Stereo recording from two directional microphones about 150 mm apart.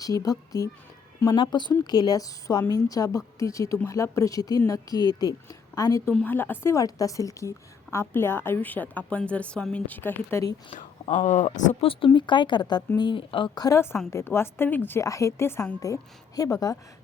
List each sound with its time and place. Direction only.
0.0 s a woman's voice: 25° left (ahead or behind)
11.1 s speech: 55° left (ahead or behind)
11.8 s speech: 35° left (ahead or behind)
13.7 s a woman's voice: 20° left (ahead or behind)